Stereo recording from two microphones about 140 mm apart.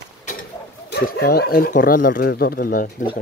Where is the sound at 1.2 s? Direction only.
90° left.